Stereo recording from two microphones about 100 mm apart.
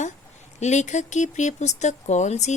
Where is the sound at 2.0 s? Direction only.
90° left.